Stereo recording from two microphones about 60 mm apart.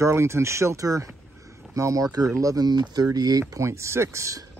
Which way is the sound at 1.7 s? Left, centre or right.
Right.